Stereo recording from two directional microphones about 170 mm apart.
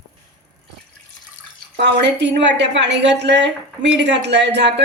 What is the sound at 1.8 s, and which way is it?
A woman's voice, 90° right.